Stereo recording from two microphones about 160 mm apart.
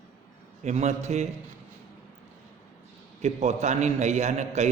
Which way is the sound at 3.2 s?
45° right (ahead or behind).